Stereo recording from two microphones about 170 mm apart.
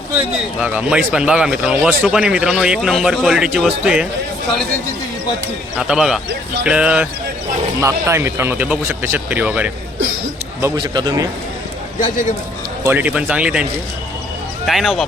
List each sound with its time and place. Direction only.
0.1 s speech: 10° right (ahead or behind)
5.7 s speech: 5° right (ahead or behind)
10.8 s a man's voice: 25° right (ahead or behind)
12.8 s speech: 10° right (ahead or behind)
14.7 s speech: centre (ahead or behind)